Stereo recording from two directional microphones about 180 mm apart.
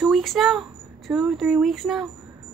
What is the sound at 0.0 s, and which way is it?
Speech, centre (ahead or behind).